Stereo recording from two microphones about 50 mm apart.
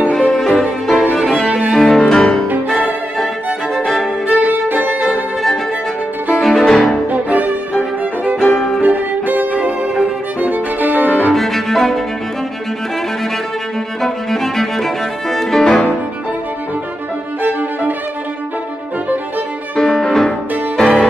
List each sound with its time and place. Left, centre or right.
0.1 s violin: centre
1.7 s cello: centre
4.3 s violin: right
6.6 s music: centre
7.1 s music: right
8.4 s music: centre
8.8 s music: right
10.4 s violin: right
11.3 s cello: centre
14.0 s music: centre
17.4 s violin: right
19.7 s music: centre